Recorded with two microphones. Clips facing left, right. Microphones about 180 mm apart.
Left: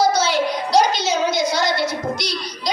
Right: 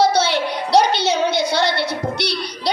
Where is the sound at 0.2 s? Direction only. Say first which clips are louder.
Even; 65° right (ahead or behind).